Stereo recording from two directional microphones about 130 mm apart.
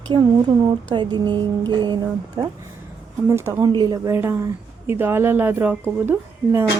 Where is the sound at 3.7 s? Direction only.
35° right (ahead or behind).